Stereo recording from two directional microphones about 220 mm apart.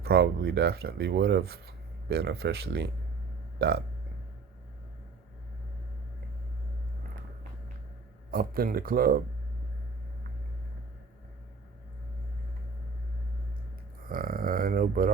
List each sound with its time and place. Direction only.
0.0 s speech: 45° right (ahead or behind)
8.3 s speech: 40° right (ahead or behind)
14.1 s speech: 40° right (ahead or behind)